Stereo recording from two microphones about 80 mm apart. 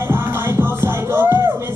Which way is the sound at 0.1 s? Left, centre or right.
Right.